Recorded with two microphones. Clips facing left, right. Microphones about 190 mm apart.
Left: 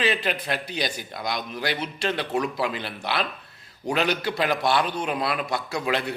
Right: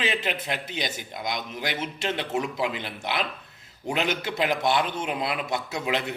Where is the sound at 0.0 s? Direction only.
20° right (ahead or behind).